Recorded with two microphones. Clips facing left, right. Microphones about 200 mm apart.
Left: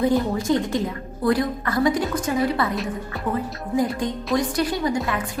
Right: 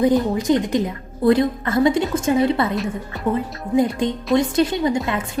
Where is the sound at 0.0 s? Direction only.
20° right (ahead or behind).